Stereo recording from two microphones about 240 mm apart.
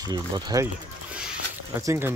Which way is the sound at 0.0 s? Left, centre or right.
Centre.